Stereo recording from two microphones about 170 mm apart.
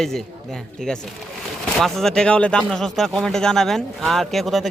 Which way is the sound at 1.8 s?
Centre (ahead or behind).